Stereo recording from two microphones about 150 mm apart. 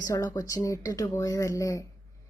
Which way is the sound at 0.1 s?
20° left (ahead or behind).